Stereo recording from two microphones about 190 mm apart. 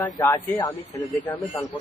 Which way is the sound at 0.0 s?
15° left (ahead or behind).